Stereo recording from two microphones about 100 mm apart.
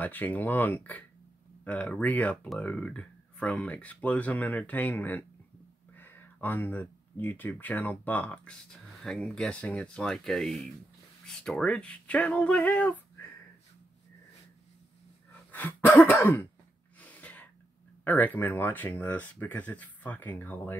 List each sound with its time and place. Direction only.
0.0 s speech: 20° left (ahead or behind)
15.6 s throat clearing: 20° left (ahead or behind)
17.0 s sneeze: 15° left (ahead or behind)
18.0 s speech: 15° left (ahead or behind)